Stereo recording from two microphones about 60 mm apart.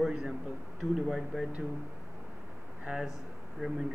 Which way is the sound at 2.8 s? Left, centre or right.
Centre.